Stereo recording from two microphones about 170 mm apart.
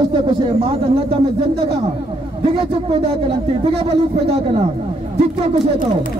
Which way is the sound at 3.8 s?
35° right (ahead or behind).